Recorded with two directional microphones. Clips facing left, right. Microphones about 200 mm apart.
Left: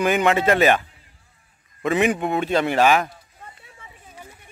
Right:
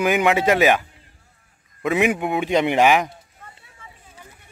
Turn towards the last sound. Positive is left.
turn(degrees=-15)  # may be behind; listen again after turning